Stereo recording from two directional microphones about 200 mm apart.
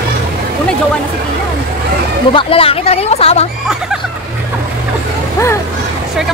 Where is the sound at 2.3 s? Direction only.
30° left (ahead or behind).